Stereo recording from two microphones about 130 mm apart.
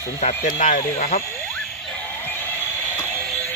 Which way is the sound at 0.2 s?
70° left (ahead or behind).